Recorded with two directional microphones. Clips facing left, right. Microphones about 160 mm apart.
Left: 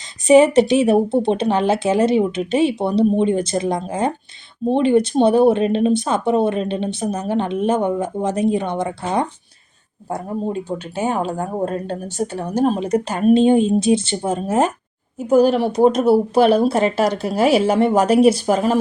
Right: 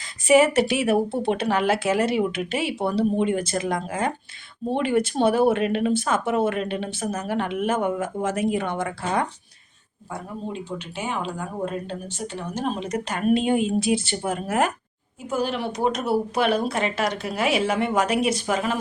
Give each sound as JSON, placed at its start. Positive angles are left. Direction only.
{"t": 0.5, "sound": "speech", "side_deg": 20}
{"t": 10.1, "sound": "speech", "side_deg": 45}
{"t": 15.3, "sound": "speech", "side_deg": 40}